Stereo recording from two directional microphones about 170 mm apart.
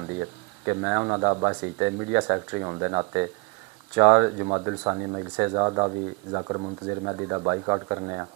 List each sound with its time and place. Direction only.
0.2 s speech: 20° right (ahead or behind)